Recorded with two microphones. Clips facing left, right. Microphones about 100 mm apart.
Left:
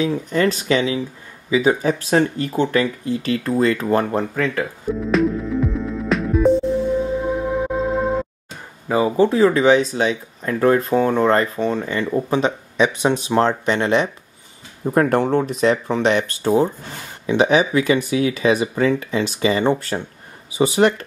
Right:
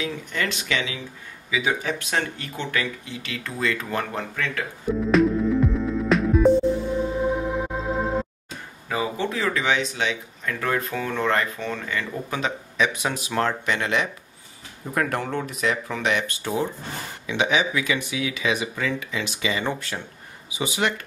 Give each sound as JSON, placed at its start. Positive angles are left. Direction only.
{"t": 0.0, "sound": "speech", "side_deg": 35}
{"t": 5.1, "sound": "music", "side_deg": 0}
{"t": 8.8, "sound": "speech", "side_deg": 35}